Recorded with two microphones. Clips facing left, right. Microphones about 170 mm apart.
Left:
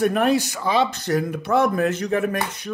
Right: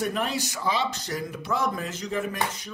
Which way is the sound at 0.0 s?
60° left (ahead or behind).